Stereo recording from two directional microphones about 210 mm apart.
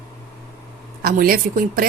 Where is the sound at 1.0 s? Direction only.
45° right (ahead or behind).